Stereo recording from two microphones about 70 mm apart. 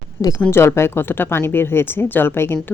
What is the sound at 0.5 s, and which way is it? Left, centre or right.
A woman's voice, left.